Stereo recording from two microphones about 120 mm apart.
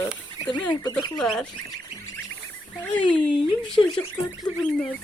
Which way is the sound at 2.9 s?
10° left (ahead or behind).